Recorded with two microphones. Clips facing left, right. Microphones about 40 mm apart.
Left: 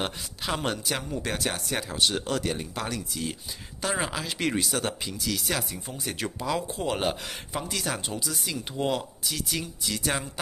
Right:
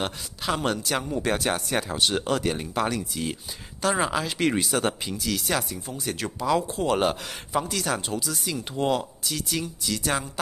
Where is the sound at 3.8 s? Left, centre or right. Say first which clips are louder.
Right 5 dB; centre.